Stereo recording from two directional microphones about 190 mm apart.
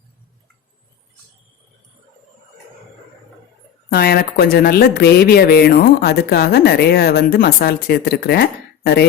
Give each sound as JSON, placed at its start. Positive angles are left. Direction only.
{"t": 3.8, "sound": "a woman's voice", "side_deg": 55}